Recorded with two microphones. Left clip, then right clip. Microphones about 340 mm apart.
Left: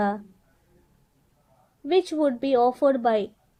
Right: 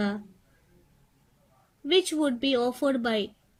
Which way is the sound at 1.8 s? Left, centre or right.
Centre.